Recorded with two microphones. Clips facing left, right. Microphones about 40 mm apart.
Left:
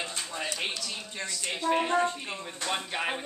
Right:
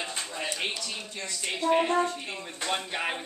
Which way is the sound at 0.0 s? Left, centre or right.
Centre.